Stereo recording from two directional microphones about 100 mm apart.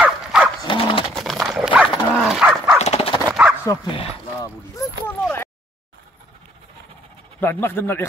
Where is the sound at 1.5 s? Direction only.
10° right (ahead or behind).